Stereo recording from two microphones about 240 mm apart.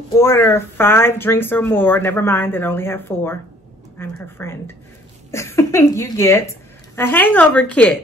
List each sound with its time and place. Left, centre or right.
0.1 s a woman's voice: centre